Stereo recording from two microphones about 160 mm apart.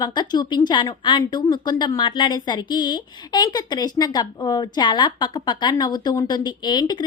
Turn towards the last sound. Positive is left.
turn(degrees=25)  # may be behind; listen again after turning